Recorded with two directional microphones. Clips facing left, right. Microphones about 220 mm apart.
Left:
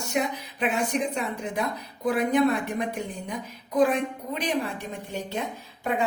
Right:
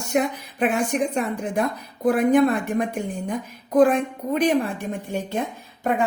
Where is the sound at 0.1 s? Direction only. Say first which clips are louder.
Right 6 dB; 50° right (ahead or behind).